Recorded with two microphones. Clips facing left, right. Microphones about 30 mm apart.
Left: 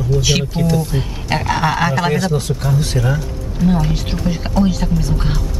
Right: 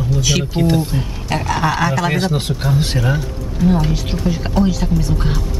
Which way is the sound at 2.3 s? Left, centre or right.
Right.